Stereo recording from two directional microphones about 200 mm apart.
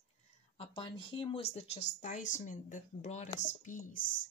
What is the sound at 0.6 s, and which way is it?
Speech, 25° left (ahead or behind).